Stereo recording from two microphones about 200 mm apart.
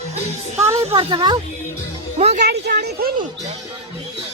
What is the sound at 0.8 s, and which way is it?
Speech, 30° right (ahead or behind).